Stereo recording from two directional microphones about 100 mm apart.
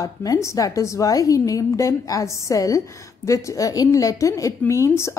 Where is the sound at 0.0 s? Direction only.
35° left (ahead or behind).